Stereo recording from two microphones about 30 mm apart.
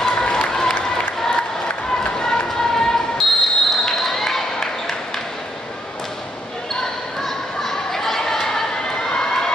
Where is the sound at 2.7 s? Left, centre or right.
Centre.